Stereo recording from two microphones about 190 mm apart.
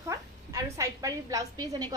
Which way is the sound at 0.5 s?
15° right (ahead or behind).